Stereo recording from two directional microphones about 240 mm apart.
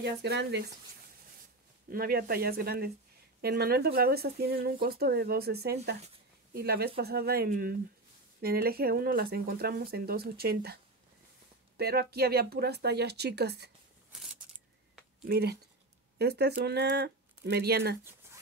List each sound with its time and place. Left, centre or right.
0.0 s speech: right
1.9 s speech: right
15.2 s speech: right